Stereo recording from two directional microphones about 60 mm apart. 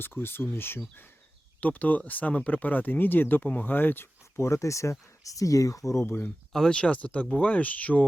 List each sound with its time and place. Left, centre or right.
0.0 s speech: left
1.6 s speech: left
4.4 s speech: left
6.1 s speech: left
6.5 s speech: centre
6.7 s speech: centre